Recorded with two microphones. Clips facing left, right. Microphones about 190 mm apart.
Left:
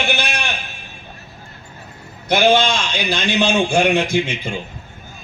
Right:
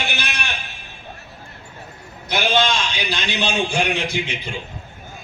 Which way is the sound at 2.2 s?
50° left (ahead or behind).